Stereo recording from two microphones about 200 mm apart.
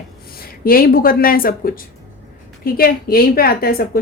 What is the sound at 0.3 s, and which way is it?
A woman's voice, 45° left (ahead or behind).